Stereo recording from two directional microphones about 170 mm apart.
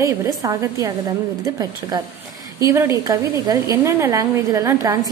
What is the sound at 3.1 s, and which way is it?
A woman's voice, 20° right (ahead or behind).